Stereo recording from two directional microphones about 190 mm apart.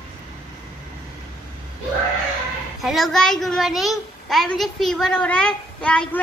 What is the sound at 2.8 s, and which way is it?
A child's voice, centre (ahead or behind).